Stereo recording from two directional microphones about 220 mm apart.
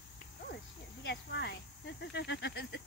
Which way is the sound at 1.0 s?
50° left (ahead or behind).